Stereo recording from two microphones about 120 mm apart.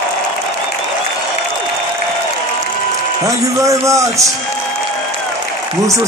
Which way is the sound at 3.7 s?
25° right (ahead or behind).